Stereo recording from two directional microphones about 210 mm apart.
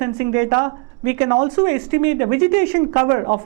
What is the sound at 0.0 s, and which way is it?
Speech, 15° right (ahead or behind).